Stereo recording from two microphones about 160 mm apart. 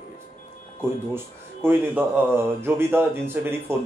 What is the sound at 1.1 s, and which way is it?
Speech, 15° right (ahead or behind).